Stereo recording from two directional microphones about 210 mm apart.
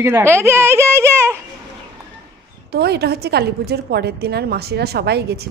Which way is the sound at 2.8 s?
50° right (ahead or behind).